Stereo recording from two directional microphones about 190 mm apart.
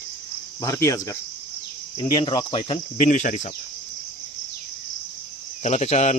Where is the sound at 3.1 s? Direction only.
40° left (ahead or behind).